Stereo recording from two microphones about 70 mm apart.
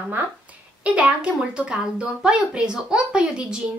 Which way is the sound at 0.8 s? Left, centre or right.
Centre.